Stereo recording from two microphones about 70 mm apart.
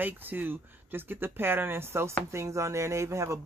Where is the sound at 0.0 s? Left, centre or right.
Right.